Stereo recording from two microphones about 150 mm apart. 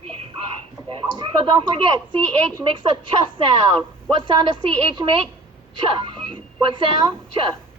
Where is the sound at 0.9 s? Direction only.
30° right (ahead or behind).